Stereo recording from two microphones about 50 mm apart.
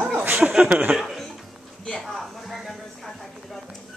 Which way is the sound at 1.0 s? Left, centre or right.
Centre.